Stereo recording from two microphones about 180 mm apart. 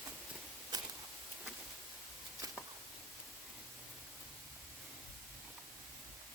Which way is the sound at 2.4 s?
20° right (ahead or behind).